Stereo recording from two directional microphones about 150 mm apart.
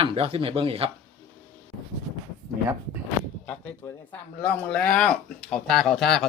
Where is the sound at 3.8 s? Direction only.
10° left (ahead or behind).